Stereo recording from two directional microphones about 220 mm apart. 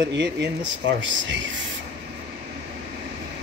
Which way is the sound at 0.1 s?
55° right (ahead or behind).